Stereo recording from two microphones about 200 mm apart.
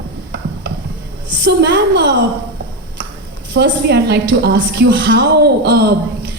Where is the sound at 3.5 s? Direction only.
60° right (ahead or behind).